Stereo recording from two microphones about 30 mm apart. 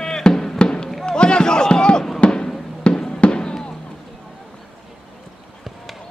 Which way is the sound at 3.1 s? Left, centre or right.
Left.